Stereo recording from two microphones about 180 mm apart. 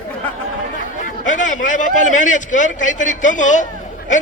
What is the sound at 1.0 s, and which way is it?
A man's voice, 45° left (ahead or behind).